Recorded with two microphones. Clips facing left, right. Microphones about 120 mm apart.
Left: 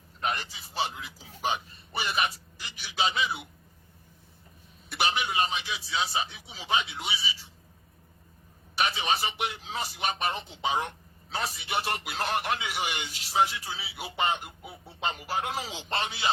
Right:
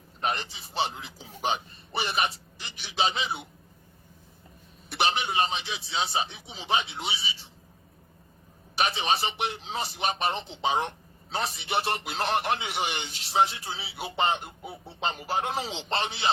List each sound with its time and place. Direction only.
0.2 s a man's voice: 25° right (ahead or behind)
4.9 s a man's voice: 30° right (ahead or behind)
8.7 s a man's voice: 25° right (ahead or behind)